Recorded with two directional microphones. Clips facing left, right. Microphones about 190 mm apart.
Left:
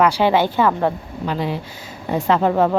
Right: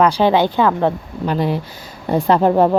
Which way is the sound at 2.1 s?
35° right (ahead or behind).